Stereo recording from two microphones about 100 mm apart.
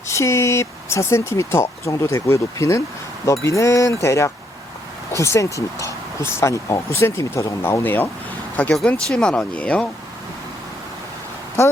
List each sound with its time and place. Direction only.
0.1 s speech: 30° left (ahead or behind)
8.7 s speech: 5° left (ahead or behind)